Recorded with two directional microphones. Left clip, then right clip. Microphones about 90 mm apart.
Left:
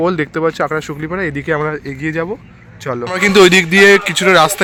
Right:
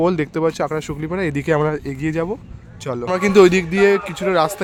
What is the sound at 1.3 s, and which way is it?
Speech, 40° right (ahead or behind).